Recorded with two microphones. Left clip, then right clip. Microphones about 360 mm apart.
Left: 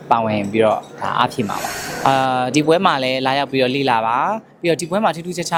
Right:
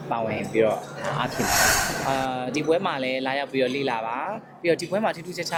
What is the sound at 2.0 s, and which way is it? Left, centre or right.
Speech, left.